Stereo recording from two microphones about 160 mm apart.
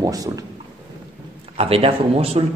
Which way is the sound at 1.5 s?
35° right (ahead or behind).